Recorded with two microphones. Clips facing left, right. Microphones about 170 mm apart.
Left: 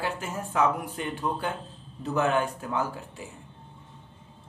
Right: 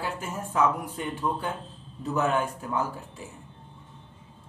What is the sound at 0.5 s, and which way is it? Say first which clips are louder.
A man's voice: even; 75° left (ahead or behind).